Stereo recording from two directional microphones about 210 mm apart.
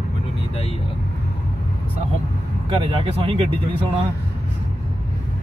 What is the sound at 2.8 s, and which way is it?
Speech, 25° right (ahead or behind).